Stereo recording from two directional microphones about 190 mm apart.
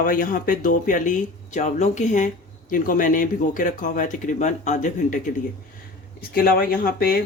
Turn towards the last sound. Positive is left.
turn(degrees=50)  # may be behind; listen again after turning